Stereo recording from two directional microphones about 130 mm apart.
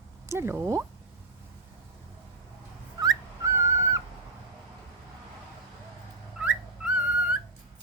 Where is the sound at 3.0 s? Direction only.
25° right (ahead or behind).